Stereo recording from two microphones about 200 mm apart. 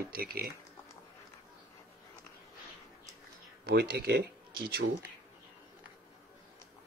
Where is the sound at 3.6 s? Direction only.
50° right (ahead or behind).